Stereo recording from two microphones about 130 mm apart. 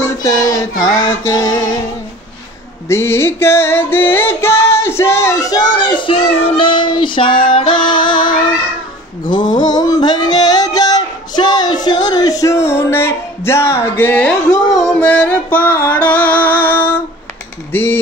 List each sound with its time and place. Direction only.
0.2 s child singing: 25° left (ahead or behind)
2.9 s music: 20° left (ahead or behind); by 8.4 s 40° left (ahead or behind)
9.3 s a sound: 35° left (ahead or behind); by 14.3 s 10° left (ahead or behind)
14.7 s music: 5° left (ahead or behind)